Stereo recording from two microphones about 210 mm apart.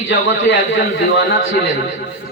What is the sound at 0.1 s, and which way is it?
A man's voice, 60° left (ahead or behind).